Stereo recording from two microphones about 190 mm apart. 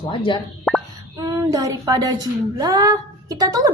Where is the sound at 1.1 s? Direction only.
20° right (ahead or behind).